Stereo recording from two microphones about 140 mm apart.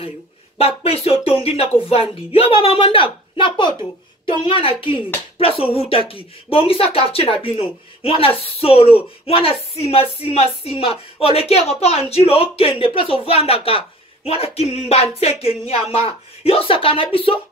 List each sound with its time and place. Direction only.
0.6 s a woman's voice: 45° left (ahead or behind)